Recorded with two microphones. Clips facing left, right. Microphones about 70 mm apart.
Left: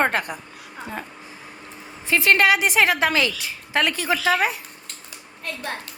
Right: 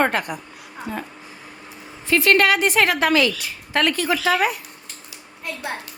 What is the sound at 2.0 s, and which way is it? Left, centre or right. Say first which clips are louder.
A woman's voice: right 1 dB; left.